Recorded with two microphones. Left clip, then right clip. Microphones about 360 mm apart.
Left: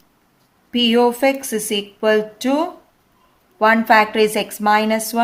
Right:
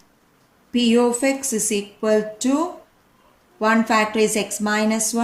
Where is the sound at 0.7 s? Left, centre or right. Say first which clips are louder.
Left 3 dB; left.